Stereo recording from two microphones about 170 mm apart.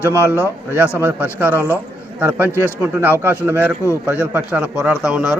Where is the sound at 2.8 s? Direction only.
10° right (ahead or behind).